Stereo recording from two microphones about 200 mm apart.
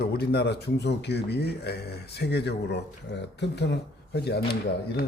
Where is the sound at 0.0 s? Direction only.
50° left (ahead or behind).